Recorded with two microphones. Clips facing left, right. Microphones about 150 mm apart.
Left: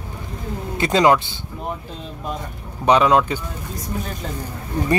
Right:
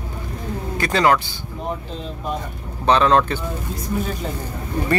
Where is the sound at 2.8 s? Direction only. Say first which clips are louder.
Left 1 dB; 15° left (ahead or behind).